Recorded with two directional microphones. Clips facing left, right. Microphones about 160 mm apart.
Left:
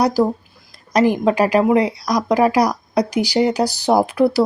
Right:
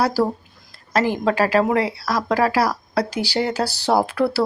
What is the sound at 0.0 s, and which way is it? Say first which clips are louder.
Speech: left 3 dB; 15° left (ahead or behind).